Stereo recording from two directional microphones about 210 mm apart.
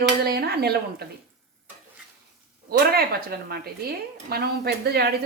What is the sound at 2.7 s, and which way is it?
Speech, 45° right (ahead or behind).